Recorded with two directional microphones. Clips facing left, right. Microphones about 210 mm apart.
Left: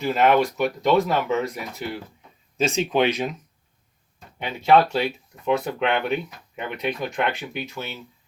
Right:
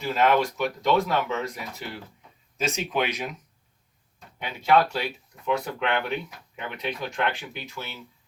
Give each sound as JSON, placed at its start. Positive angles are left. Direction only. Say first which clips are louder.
{"t": 0.0, "sound": "speech", "louder": "left 3 dB", "side_deg": 20}
{"t": 2.6, "sound": "speech", "louder": "left 6 dB", "side_deg": 25}
{"t": 4.7, "sound": "speech", "louder": "left 4 dB", "side_deg": 25}